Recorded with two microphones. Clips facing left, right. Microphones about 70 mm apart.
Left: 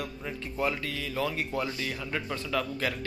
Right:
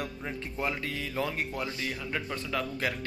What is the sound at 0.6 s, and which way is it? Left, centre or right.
Speech, centre.